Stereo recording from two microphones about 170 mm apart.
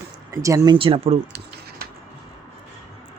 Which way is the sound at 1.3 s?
70° right (ahead or behind).